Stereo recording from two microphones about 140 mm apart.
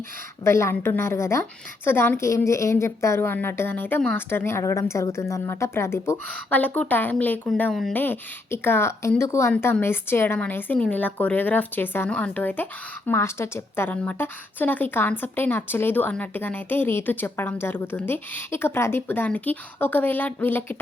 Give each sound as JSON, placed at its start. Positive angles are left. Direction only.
{"t": 0.4, "sound": "a woman's voice", "side_deg": 20}
{"t": 7.9, "sound": "a woman's voice", "side_deg": 15}